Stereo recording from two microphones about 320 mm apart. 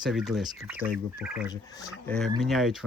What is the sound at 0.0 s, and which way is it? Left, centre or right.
Speech, centre.